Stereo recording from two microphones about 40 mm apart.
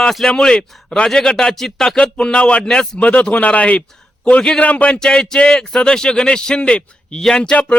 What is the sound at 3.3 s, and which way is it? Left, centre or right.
A man's voice, left.